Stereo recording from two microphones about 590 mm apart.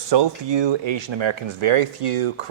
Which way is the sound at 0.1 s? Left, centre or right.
Right.